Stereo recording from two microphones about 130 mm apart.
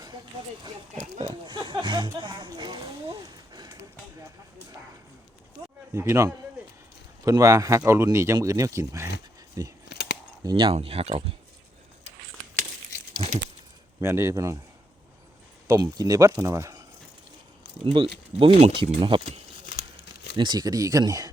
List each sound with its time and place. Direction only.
1.2 s speech: 35° right (ahead or behind)
2.6 s a sound: 35° right (ahead or behind)
5.9 s speech: 20° right (ahead or behind)
10.4 s speech: 40° right (ahead or behind)
14.0 s speech: 20° right (ahead or behind)
15.6 s speech: 30° right (ahead or behind)
17.8 s speech: 40° right (ahead or behind)